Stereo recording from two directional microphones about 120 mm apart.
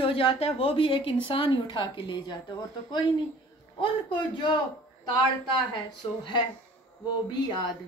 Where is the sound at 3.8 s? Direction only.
40° left (ahead or behind).